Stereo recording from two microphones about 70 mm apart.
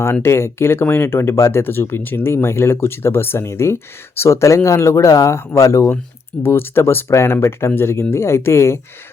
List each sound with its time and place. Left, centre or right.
0.0 s speech: left
6.4 s speech: left